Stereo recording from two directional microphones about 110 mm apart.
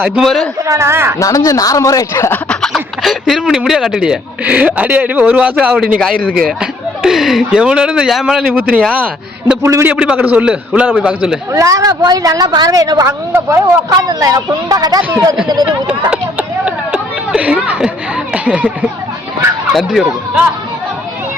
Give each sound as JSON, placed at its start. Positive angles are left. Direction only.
{"t": 0.2, "sound": "speech", "side_deg": 0}
{"t": 0.7, "sound": "a woman's voice", "side_deg": -25}
{"t": 1.2, "sound": "speech", "side_deg": 30}
{"t": 2.5, "sound": "speech", "side_deg": 5}
{"t": 9.6, "sound": "a woman's voice", "side_deg": -25}
{"t": 9.9, "sound": "speech", "side_deg": -10}
{"t": 11.5, "sound": "speech", "side_deg": -30}
{"t": 16.6, "sound": "a sound", "side_deg": -10}
{"t": 18.4, "sound": "speech", "side_deg": -10}